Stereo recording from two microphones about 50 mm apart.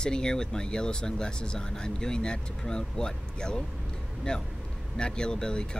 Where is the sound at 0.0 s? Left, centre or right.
Centre.